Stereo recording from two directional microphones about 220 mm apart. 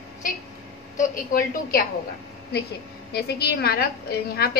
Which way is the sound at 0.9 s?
40° left (ahead or behind).